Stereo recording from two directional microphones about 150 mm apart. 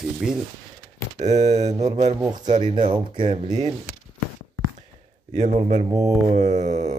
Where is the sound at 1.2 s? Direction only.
50° right (ahead or behind).